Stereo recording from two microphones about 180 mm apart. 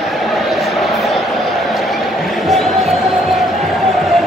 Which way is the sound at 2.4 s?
Centre (ahead or behind).